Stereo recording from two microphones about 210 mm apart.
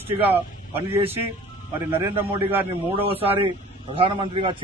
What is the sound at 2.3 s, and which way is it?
Speech, 10° right (ahead or behind).